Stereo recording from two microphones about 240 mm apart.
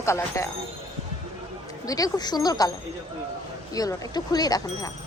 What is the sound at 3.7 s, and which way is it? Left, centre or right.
A woman's voice, centre.